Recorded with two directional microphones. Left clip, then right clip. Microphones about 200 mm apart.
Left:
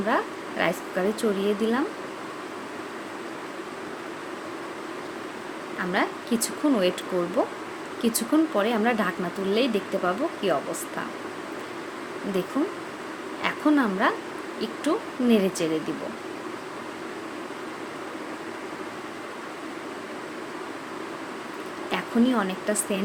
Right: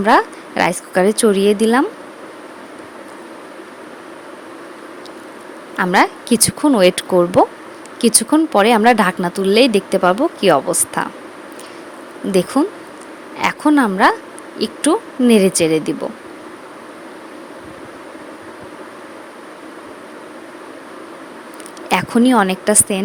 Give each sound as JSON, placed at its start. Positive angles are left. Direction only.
{"t": 0.0, "sound": "speech", "side_deg": -50}
{"t": 5.8, "sound": "speech", "side_deg": -50}
{"t": 12.6, "sound": "a woman's voice", "side_deg": -45}
{"t": 21.8, "sound": "speech", "side_deg": -50}